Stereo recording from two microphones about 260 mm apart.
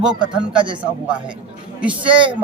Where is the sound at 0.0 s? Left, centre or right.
Centre.